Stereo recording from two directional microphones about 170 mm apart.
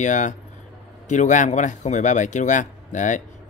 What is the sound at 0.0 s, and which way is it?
Speech, 45° left (ahead or behind).